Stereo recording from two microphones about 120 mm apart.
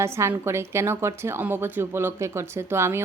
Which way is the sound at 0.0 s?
20° right (ahead or behind).